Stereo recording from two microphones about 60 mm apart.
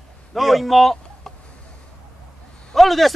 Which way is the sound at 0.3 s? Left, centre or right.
Centre.